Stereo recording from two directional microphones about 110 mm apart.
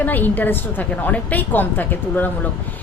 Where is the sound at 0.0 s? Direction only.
15° left (ahead or behind).